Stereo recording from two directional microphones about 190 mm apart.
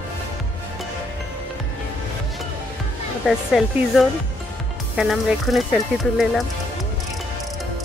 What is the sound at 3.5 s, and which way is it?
Speech, centre (ahead or behind).